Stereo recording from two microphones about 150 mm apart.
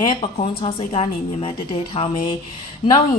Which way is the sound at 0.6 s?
40° left (ahead or behind).